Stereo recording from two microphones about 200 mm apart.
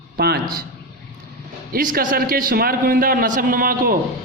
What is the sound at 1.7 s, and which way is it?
A man's voice, 45° right (ahead or behind).